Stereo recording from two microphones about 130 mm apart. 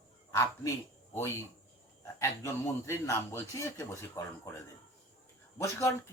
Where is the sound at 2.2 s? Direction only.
20° left (ahead or behind).